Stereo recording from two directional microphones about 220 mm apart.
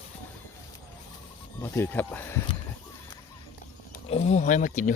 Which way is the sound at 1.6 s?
10° left (ahead or behind).